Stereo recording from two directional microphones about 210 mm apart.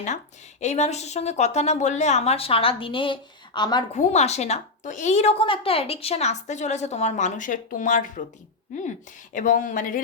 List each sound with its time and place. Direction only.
0.6 s a woman's voice: 30° left (ahead or behind)
3.9 s a woman's voice: 35° left (ahead or behind)
9.3 s a woman's voice: 40° left (ahead or behind)